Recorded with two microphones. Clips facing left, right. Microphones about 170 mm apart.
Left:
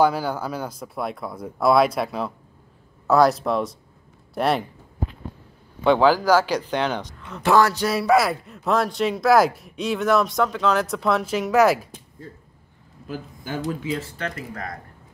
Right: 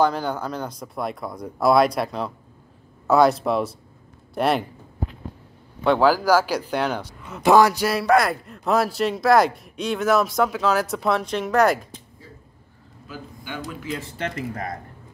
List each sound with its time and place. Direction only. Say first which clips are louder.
0.0 s a man's voice: left 1 dB; 5° left (ahead or behind)
5.9 s speech: left 1 dB; 5° right (ahead or behind)
7.9 s a man's voice: even; centre (ahead or behind)
13.0 s a man's voice: left 4 dB; 45° left (ahead or behind)
13.9 s speech: even; 20° right (ahead or behind)